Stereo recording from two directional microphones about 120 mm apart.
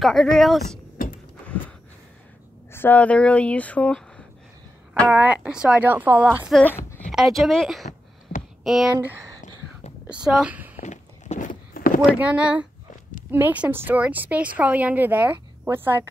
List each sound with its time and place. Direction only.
0.0 s speech: centre (ahead or behind)
2.7 s speech: 15° left (ahead or behind)
5.1 s speech: 10° right (ahead or behind)
7.1 s speech: centre (ahead or behind)
9.0 s speech: 25° right (ahead or behind)
10.2 s speech: 5° right (ahead or behind)
10.8 s a sound: 80° left
12.2 s speech: 10° right (ahead or behind)